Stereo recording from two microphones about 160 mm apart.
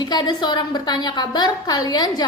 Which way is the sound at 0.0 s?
25° left (ahead or behind).